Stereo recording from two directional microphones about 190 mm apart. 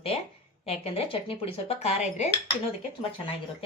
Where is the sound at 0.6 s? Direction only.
30° left (ahead or behind).